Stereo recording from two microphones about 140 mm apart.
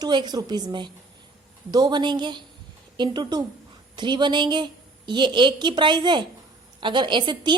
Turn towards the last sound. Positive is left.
turn(degrees=-35)  # may be behind; listen again after turning